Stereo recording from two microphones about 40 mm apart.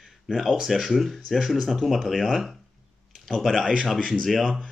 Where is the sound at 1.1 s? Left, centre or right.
Centre.